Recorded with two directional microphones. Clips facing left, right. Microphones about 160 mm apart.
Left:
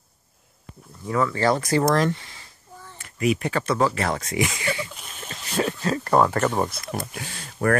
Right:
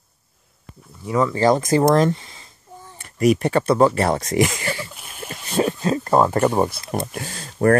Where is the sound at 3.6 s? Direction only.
30° right (ahead or behind).